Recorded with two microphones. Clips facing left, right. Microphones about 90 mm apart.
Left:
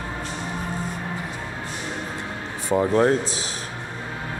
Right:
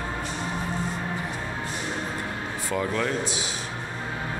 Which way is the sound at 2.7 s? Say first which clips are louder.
Left 9 dB; 30° left (ahead or behind).